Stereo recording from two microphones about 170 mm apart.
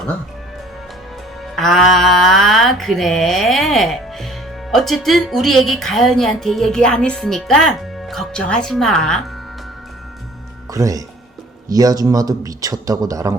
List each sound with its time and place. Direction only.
1.5 s speech: centre (ahead or behind)
10.7 s a man's voice: 20° right (ahead or behind)